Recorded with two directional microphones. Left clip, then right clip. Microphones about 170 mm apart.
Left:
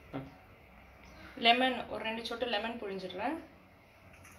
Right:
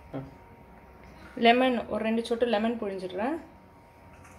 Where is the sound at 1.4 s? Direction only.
55° right (ahead or behind).